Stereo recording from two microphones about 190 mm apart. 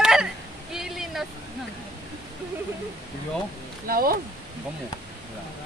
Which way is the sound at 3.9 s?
50° right (ahead or behind).